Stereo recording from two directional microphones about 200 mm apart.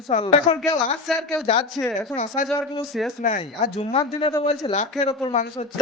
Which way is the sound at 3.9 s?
25° left (ahead or behind).